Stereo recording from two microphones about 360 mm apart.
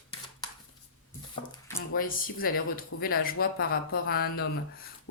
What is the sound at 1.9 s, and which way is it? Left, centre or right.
Speech, left.